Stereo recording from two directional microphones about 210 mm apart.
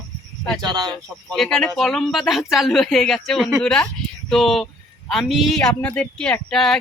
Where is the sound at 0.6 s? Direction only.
20° right (ahead or behind).